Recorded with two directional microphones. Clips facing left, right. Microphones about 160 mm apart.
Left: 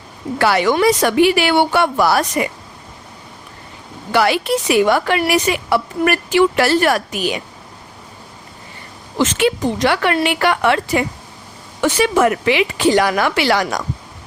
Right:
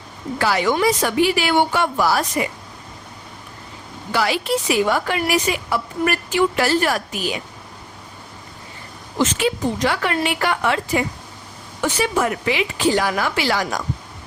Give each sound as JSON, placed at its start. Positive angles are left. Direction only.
{"t": 0.3, "sound": "a woman's voice", "side_deg": 70}
{"t": 4.1, "sound": "a woman's voice", "side_deg": 65}
{"t": 9.1, "sound": "a woman's voice", "side_deg": 85}
{"t": 11.8, "sound": "a woman's voice", "side_deg": 90}